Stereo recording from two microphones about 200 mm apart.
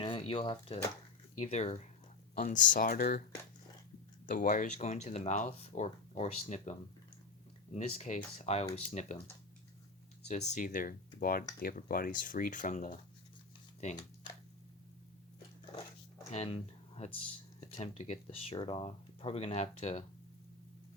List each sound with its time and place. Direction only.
0.0 s speech: 25° left (ahead or behind); by 3.2 s 45° left (ahead or behind)
4.3 s speech: 40° left (ahead or behind)
10.2 s speech: 35° left (ahead or behind)
16.3 s speech: 30° left (ahead or behind)